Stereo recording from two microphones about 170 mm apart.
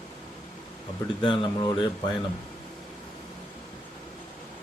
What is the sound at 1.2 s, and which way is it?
Speech, 30° left (ahead or behind).